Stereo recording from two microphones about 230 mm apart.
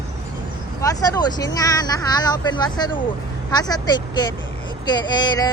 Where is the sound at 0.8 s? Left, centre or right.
Centre.